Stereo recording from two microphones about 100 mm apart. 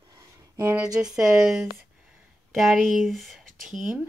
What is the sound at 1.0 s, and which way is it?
Speech, 5° right (ahead or behind).